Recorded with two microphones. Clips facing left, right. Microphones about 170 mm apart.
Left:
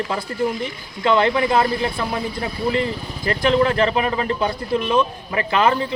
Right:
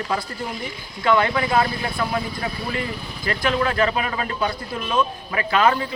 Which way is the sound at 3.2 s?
25° left (ahead or behind).